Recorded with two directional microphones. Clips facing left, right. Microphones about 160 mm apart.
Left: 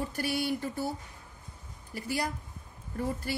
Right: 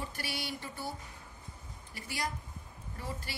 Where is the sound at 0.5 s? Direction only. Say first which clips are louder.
Left 9 dB; 45° left (ahead or behind).